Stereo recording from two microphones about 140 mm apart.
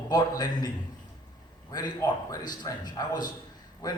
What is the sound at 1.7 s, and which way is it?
A man's voice, 30° left (ahead or behind).